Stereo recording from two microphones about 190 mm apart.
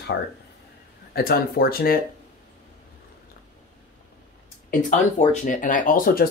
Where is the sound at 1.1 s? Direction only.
55° left (ahead or behind).